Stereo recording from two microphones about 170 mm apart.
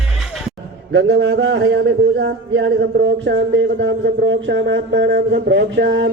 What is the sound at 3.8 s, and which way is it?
Speech, 90° right.